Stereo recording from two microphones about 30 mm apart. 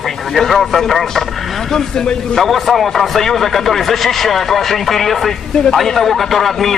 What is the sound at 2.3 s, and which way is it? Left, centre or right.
Speech, centre.